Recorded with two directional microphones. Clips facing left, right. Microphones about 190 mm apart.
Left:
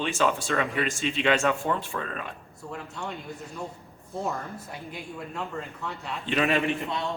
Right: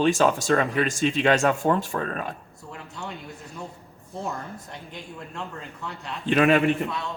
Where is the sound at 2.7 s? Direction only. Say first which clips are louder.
Left 1 dB; centre (ahead or behind).